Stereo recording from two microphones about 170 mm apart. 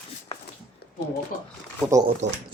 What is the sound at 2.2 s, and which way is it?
Speech, 90° right.